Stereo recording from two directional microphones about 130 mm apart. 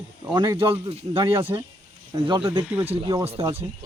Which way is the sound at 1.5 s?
30° right (ahead or behind).